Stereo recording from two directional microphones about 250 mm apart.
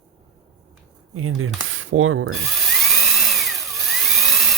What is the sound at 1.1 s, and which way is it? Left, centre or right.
Speech, right.